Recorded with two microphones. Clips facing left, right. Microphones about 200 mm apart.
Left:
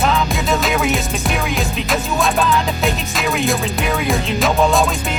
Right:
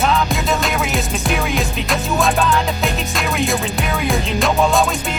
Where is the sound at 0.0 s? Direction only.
Centre (ahead or behind).